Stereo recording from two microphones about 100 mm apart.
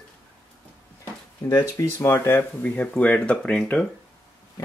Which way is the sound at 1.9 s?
25° left (ahead or behind).